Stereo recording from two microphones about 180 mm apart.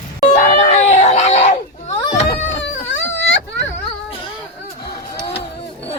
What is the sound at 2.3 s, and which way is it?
Whimper, 80° left.